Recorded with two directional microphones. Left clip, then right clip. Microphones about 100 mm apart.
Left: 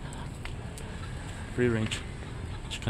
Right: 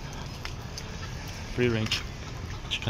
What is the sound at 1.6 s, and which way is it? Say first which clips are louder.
Speech: right 1 dB; 10° right (ahead or behind).